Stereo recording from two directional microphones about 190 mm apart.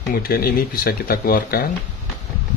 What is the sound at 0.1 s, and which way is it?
Speech, 50° left (ahead or behind).